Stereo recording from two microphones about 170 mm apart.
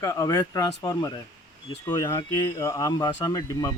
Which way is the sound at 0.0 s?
20° left (ahead or behind).